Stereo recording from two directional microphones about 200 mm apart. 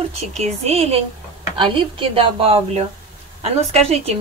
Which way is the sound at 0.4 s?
30° right (ahead or behind).